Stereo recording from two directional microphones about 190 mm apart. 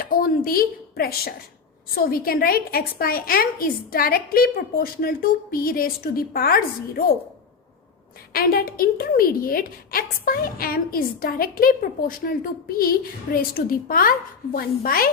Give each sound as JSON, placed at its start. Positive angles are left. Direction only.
{"t": 0.0, "sound": "a woman's voice", "side_deg": 50}
{"t": 8.3, "sound": "a woman's voice", "side_deg": 50}